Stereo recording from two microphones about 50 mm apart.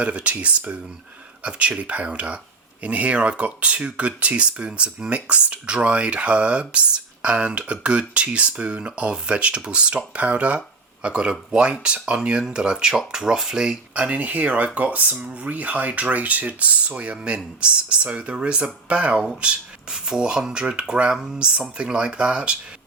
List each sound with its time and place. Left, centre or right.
0.0 s speech: right
13.9 s speech: right
15.2 s speech: centre
15.4 s speech: right